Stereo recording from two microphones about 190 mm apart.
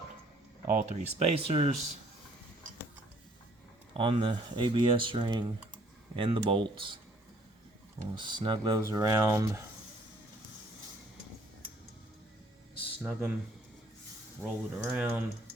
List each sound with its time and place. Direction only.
0.7 s speech: 40° right (ahead or behind)
3.9 s speech: 25° right (ahead or behind)
8.1 s speech: 25° right (ahead or behind)
13.0 s speech: 5° right (ahead or behind)
14.4 s speech: 10° right (ahead or behind)